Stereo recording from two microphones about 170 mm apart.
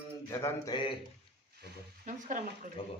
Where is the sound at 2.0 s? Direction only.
50° right (ahead or behind).